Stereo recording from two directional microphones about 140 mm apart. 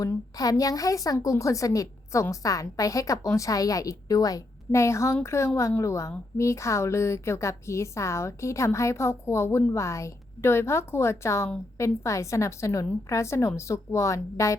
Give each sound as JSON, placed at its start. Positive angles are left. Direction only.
{"t": 0.0, "sound": "a woman's voice", "side_deg": 25}